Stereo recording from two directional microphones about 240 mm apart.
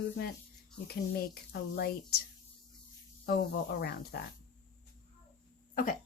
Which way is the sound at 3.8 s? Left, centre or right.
Left.